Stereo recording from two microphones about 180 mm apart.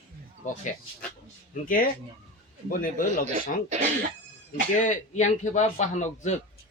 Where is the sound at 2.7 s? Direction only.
50° left (ahead or behind).